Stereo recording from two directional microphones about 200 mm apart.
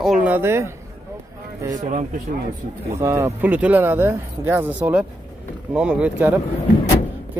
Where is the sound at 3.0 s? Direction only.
15° right (ahead or behind).